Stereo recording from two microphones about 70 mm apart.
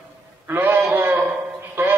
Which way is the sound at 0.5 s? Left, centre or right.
Right.